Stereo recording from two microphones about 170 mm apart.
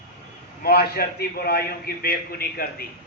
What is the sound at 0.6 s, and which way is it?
A man's voice, 65° left (ahead or behind).